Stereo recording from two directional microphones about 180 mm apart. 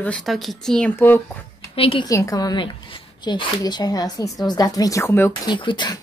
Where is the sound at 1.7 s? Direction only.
30° left (ahead or behind).